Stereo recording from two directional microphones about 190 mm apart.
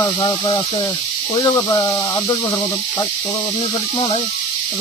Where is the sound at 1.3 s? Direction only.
20° left (ahead or behind).